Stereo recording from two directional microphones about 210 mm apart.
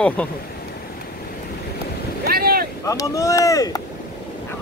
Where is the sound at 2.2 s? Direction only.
45° right (ahead or behind).